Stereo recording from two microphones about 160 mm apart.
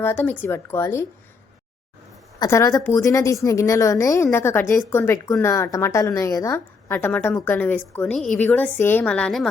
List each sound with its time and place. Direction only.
0.0 s a woman's voice: 10° left (ahead or behind)
2.4 s a woman's voice: 20° left (ahead or behind)